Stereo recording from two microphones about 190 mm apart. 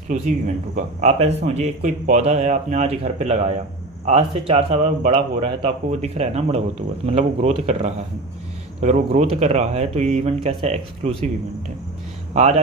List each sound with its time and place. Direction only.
0.7 s speech: 35° right (ahead or behind)